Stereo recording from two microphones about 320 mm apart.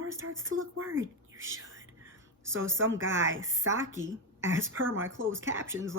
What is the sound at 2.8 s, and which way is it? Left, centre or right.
Speech, right.